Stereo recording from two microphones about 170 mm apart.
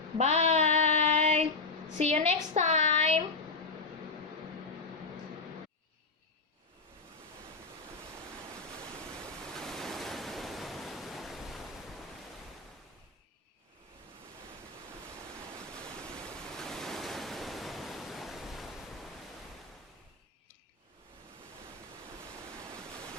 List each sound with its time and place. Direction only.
0.2 s child singing: 40° right (ahead or behind)
2.0 s a woman's voice: 40° right (ahead or behind)
9.6 s waves: centre (ahead or behind)
16.5 s waves: 5° left (ahead or behind)